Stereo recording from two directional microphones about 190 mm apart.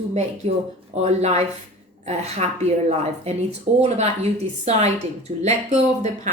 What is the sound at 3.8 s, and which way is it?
Speech, 35° right (ahead or behind).